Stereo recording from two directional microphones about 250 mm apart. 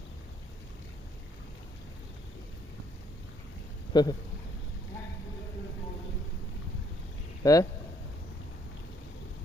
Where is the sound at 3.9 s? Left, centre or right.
Centre.